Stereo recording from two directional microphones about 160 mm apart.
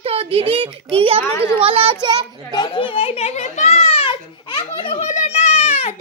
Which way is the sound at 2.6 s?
30° left (ahead or behind).